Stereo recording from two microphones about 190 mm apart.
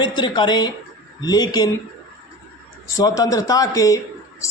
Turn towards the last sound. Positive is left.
turn(degrees=20)  # may be behind; listen again after turning